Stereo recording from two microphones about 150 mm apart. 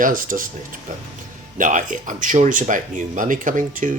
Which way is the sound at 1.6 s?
60° right (ahead or behind).